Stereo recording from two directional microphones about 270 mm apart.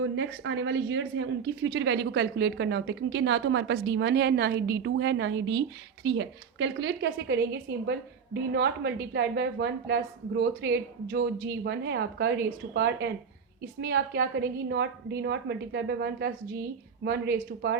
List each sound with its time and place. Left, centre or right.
0.0 s speech: right